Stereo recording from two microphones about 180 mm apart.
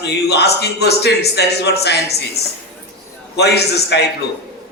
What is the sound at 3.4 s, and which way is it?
Speech, 65° left (ahead or behind).